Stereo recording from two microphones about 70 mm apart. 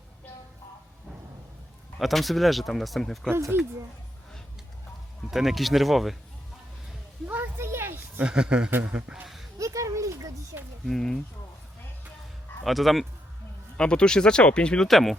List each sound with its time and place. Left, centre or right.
2.0 s speech: centre
3.2 s speech: right
5.3 s speech: centre
7.3 s a sound: right
8.2 s speech: centre
9.2 s a sound: centre
9.6 s a sound: right
10.8 s speech: centre
12.6 s speech: centre
13.7 s speech: centre
14.8 s speech: centre